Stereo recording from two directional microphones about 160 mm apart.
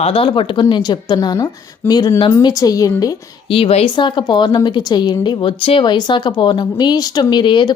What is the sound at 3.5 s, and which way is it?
A woman's voice, 35° left (ahead or behind).